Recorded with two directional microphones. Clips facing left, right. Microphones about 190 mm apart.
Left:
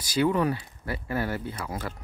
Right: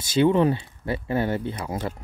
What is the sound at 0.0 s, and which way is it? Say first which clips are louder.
Speech: right 5 dB; 25° right (ahead or behind).